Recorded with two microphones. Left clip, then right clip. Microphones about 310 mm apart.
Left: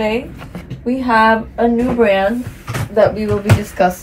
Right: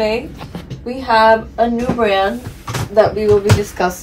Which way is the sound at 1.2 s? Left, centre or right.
Right.